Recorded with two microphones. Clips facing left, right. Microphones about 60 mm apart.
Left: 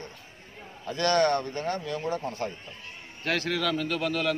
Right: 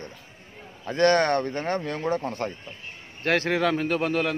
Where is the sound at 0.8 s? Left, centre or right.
Right.